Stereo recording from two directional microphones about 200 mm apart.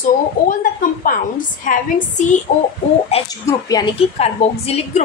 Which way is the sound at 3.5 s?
20° left (ahead or behind).